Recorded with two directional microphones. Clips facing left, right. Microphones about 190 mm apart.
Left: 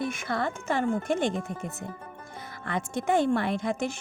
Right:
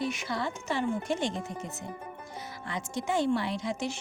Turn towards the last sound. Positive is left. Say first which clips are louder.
# left 4 dB
turn(degrees=55)  # may be behind; listen again after turning